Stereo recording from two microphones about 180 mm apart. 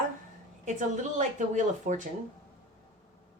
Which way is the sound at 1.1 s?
45° right (ahead or behind).